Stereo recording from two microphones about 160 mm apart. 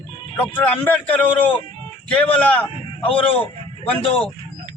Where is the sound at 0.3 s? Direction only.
10° left (ahead or behind).